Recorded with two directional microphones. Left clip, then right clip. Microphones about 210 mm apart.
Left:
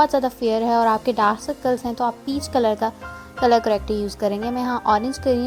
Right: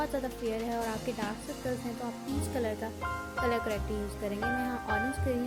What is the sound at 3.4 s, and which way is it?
Speech, 25° left (ahead or behind).